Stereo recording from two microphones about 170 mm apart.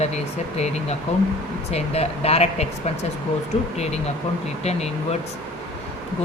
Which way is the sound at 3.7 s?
40° left (ahead or behind).